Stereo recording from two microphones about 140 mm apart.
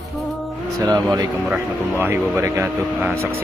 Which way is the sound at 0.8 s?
25° right (ahead or behind).